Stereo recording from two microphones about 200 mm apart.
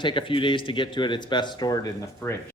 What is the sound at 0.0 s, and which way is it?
Speech, 25° left (ahead or behind).